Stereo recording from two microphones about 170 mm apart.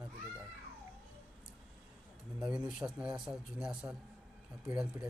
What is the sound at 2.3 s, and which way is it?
Speech, 5° right (ahead or behind).